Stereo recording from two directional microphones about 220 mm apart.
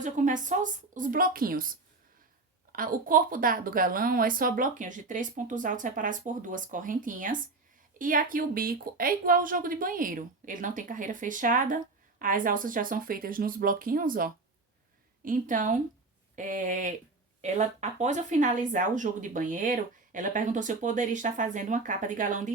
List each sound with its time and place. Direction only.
0.0 s speech: 35° right (ahead or behind)
2.7 s speech: 40° right (ahead or behind)